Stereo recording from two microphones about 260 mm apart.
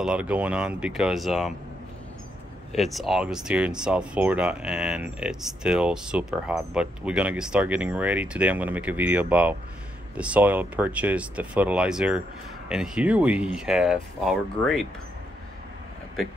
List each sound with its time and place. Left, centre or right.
0.0 s speech: centre
2.7 s speech: centre